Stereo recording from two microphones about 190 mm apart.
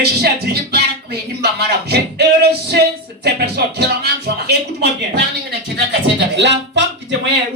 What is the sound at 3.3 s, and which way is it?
Speech, 60° right (ahead or behind).